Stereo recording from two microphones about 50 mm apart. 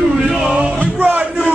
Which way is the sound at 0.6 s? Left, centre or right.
Right.